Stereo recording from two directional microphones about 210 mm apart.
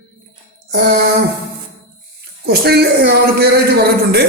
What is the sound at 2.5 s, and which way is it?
Speech, 50° right (ahead or behind).